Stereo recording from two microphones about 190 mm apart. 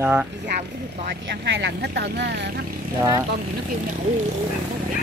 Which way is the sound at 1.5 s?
65° right (ahead or behind).